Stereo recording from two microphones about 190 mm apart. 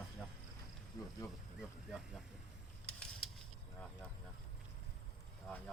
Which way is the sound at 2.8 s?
5° left (ahead or behind).